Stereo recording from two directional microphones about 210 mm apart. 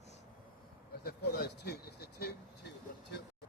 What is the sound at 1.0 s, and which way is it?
Vehicle, 50° left (ahead or behind).